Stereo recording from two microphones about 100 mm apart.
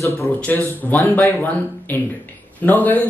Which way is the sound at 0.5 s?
20° left (ahead or behind).